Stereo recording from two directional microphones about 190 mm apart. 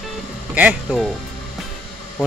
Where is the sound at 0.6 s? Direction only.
5° right (ahead or behind).